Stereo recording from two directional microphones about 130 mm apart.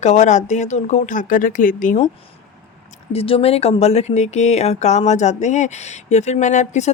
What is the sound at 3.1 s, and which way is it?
Speech, 45° left (ahead or behind).